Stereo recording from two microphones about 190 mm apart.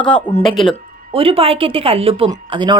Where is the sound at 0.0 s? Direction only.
10° left (ahead or behind).